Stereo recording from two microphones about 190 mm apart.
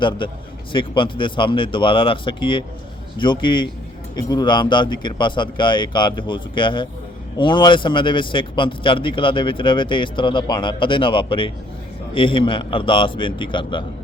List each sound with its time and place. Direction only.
0.7 s a man's voice: 25° left (ahead or behind)